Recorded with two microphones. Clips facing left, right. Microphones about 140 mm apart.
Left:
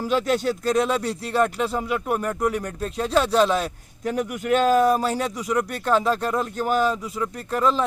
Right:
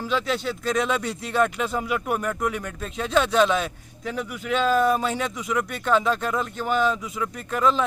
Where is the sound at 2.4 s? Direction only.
40° left (ahead or behind).